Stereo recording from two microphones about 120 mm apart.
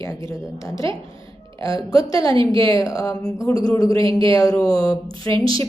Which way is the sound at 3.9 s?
45° right (ahead or behind).